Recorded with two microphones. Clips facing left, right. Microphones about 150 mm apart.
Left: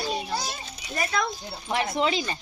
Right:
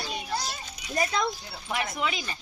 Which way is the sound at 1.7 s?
30° left (ahead or behind).